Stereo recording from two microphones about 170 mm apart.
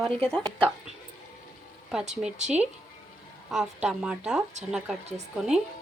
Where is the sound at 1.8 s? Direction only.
5° right (ahead or behind).